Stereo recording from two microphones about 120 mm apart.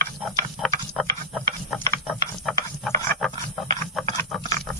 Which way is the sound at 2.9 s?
25° left (ahead or behind).